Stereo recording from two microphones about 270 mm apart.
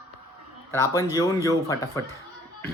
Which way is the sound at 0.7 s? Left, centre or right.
Centre.